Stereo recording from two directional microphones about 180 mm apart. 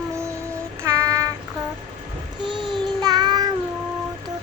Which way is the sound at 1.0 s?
15° right (ahead or behind).